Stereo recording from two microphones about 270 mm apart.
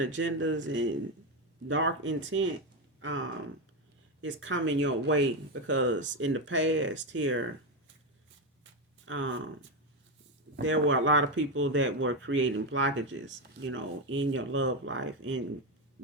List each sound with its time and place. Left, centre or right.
0.0 s speech: right
9.0 s speech: right